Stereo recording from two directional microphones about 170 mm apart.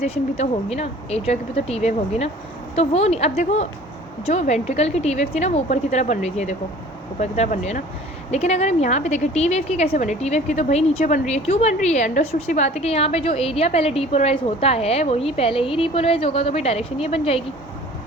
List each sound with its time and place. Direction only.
0.0 s speech: 40° left (ahead or behind)